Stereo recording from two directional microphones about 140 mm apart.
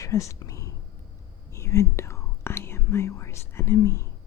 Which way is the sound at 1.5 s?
20° left (ahead or behind).